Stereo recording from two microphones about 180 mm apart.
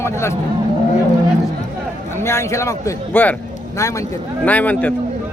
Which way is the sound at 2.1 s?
15° left (ahead or behind).